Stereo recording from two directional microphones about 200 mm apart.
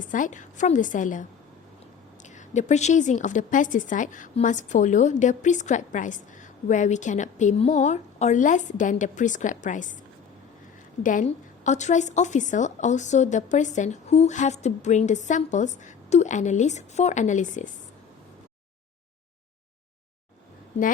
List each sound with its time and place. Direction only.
0.0 s a woman's voice: 40° left (ahead or behind)
2.5 s a woman's voice: 35° left (ahead or behind)
11.0 s a woman's voice: 40° left (ahead or behind)